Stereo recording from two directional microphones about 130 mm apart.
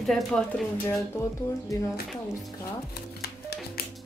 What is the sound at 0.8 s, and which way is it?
Speech, 20° left (ahead or behind).